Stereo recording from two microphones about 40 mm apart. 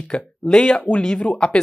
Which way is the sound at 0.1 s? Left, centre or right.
Left.